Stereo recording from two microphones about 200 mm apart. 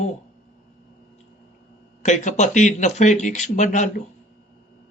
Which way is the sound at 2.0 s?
35° left (ahead or behind).